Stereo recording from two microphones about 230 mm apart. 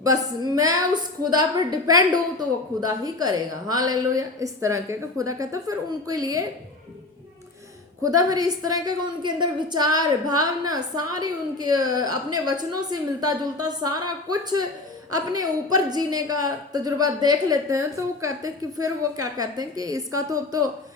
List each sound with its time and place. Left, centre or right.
0.0 s a woman's voice: centre
8.0 s a woman's voice: centre